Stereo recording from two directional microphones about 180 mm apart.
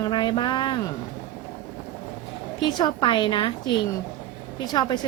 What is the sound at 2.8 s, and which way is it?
Speech, 25° left (ahead or behind).